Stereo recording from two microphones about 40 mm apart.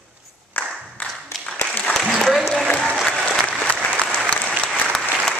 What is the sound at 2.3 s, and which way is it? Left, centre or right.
Applause, centre.